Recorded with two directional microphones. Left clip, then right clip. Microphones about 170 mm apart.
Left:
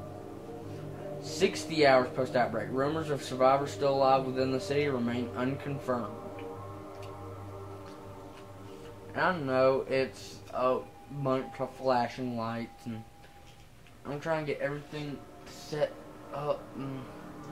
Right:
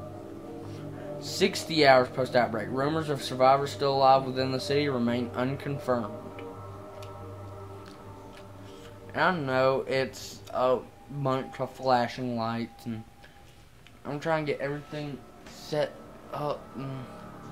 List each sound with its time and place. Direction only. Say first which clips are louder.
1.2 s speech: right 2 dB; 35° right (ahead or behind)
9.1 s speech: right 3 dB; 35° right (ahead or behind)
10.5 s a sound: right 3 dB; 35° right (ahead or behind)
11.2 s speech: right 2 dB; 35° right (ahead or behind)
14.0 s speech: right 4 dB; 35° right (ahead or behind)
15.7 s speech: right 2 dB; 40° right (ahead or behind)